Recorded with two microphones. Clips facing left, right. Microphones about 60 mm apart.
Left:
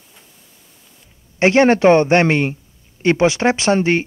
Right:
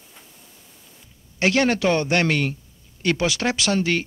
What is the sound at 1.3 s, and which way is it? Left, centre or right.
Speech, left.